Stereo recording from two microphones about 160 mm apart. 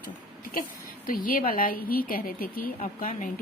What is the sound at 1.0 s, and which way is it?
A woman's voice, 60° left (ahead or behind).